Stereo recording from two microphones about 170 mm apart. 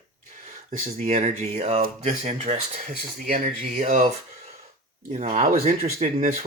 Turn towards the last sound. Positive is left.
turn(degrees=-45)  # may be behind; listen again after turning